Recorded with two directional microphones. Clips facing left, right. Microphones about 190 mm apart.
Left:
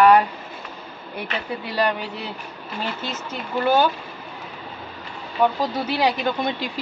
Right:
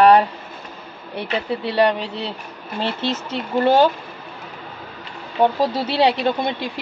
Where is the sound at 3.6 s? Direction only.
30° right (ahead or behind).